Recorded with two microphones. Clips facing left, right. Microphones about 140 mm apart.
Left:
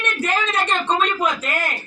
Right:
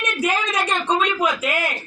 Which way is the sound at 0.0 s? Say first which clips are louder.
Even; 10° right (ahead or behind).